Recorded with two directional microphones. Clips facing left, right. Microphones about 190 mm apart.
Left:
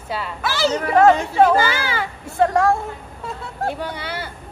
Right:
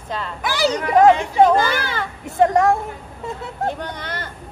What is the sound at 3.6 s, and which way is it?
Speech, 10° left (ahead or behind).